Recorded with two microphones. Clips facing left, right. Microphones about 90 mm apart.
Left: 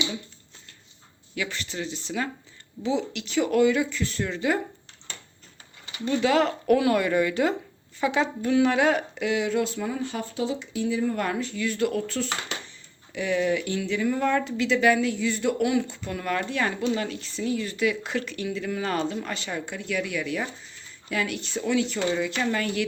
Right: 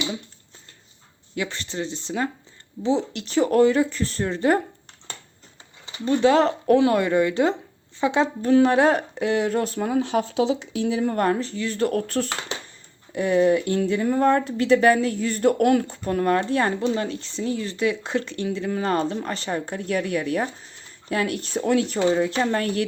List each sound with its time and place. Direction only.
1.4 s a woman's voice: 30° right (ahead or behind)
6.1 s a woman's voice: 30° right (ahead or behind); by 11.3 s 55° right (ahead or behind)
11.3 s a woman's voice: 35° right (ahead or behind)
11.9 s speech: 55° right (ahead or behind)
13.1 s a woman's voice: 40° right (ahead or behind)
21.9 s a woman's voice: 30° right (ahead or behind)